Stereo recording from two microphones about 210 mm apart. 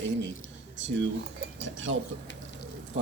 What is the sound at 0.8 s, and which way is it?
Speech, 60° right (ahead or behind).